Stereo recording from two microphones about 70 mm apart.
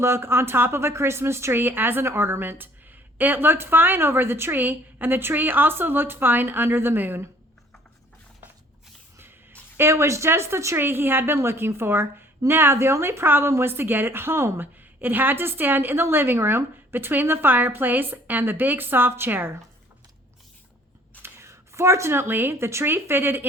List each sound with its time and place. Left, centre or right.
0.0 s a woman's voice: right
9.1 s a sound: right
10.8 s a woman's voice: right
21.2 s speech: right